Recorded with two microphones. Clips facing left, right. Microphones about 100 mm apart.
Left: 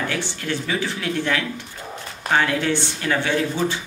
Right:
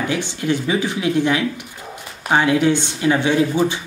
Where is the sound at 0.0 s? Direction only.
20° right (ahead or behind).